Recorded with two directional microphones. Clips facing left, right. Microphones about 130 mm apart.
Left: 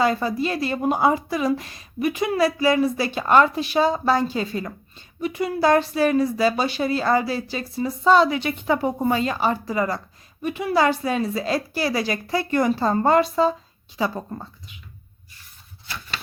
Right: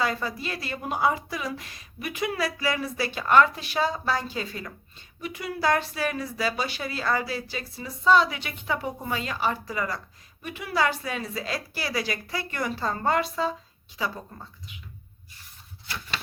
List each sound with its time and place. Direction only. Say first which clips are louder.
0.0 s a woman's voice: left 7 dB; 25° left (ahead or behind)